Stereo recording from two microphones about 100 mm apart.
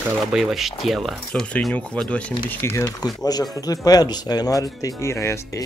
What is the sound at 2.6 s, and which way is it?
Speech, 25° left (ahead or behind).